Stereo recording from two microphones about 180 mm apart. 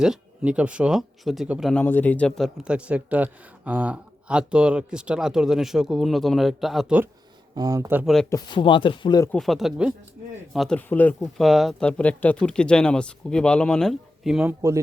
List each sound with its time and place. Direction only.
0.0 s speech: 5° right (ahead or behind)
1.8 s speech: 10° left (ahead or behind); by 7.1 s 5° right (ahead or behind)
7.5 s speech: 20° right (ahead or behind)
8.0 s speech: centre (ahead or behind)
8.3 s speech: 25° left (ahead or behind)
9.3 s speech: centre (ahead or behind)